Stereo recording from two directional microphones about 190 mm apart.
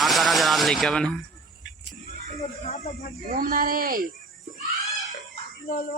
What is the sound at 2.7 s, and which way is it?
Speech, 35° left (ahead or behind).